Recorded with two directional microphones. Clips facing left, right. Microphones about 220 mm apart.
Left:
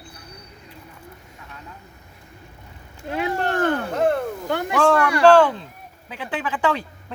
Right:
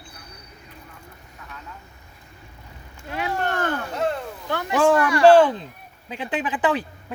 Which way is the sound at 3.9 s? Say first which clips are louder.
Left 5 dB; 50° left (ahead or behind).